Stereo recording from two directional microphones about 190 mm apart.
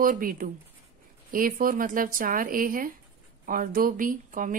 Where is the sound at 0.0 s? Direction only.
45° right (ahead or behind).